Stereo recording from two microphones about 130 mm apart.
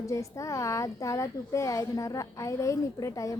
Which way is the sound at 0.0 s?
25° left (ahead or behind).